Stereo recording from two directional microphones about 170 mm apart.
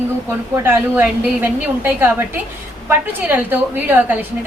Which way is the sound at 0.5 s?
10° right (ahead or behind).